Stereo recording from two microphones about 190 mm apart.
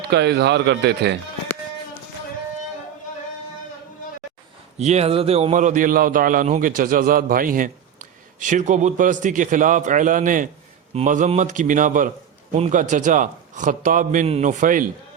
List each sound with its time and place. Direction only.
0.1 s speech: 60° right (ahead or behind)
4.8 s a man's voice: 35° right (ahead or behind)